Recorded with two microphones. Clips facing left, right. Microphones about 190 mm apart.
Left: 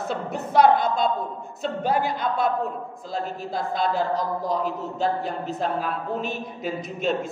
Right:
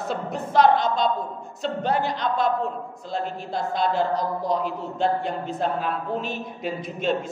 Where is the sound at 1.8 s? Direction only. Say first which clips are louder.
Left 1 dB; 10° left (ahead or behind).